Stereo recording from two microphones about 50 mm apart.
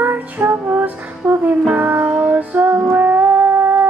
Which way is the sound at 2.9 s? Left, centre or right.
Right.